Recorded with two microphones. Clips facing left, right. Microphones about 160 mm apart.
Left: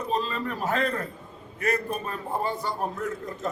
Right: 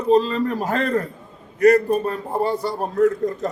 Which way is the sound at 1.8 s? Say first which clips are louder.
Right 10 dB; 40° right (ahead or behind).